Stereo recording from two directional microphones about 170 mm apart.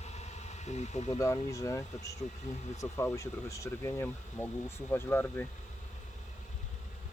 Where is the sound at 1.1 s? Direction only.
20° left (ahead or behind).